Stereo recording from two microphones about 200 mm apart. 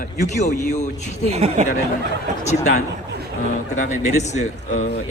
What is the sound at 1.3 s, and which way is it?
Speech, 30° right (ahead or behind).